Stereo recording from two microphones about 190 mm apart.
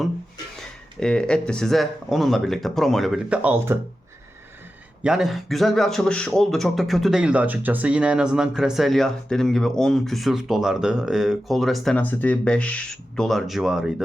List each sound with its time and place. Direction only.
0.9 s speech: 5° left (ahead or behind)
5.0 s speech: centre (ahead or behind)